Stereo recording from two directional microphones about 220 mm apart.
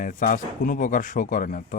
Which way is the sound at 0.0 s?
35° left (ahead or behind).